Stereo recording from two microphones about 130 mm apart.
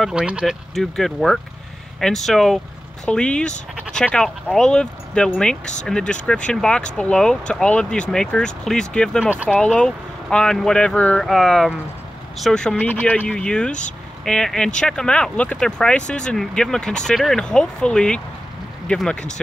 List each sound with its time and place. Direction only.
0.0 s speech: 5° right (ahead or behind)
9.2 s speech: 10° right (ahead or behind)
9.5 s speech: 10° left (ahead or behind)